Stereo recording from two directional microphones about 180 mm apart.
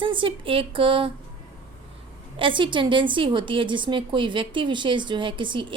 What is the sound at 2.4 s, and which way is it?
A woman's voice, 25° right (ahead or behind).